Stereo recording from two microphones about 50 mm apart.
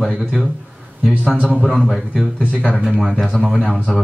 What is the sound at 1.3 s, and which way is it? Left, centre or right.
Speech, right.